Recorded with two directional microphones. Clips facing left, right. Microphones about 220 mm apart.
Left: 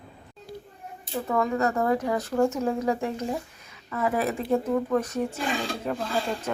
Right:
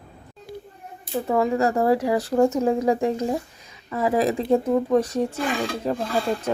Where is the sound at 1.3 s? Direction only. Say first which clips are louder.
Right 4 dB; 25° right (ahead or behind).